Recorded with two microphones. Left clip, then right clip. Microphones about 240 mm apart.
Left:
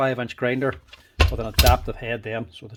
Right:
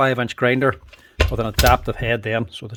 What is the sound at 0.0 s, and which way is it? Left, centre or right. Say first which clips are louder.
Speech: right 5 dB; right.